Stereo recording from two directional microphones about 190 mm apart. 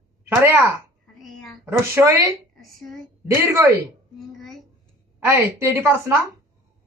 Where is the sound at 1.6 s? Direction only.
15° right (ahead or behind).